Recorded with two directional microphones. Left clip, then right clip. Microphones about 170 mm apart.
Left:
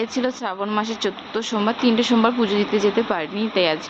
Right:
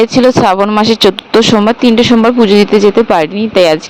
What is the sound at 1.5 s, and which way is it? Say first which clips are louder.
Speech: right 12 dB; 60° right (ahead or behind).